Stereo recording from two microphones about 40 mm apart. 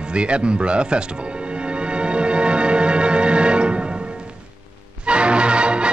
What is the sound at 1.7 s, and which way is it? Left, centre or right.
Music, right.